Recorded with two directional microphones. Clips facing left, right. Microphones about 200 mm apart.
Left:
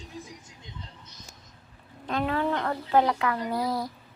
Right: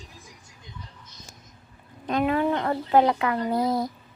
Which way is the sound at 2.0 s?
15° right (ahead or behind).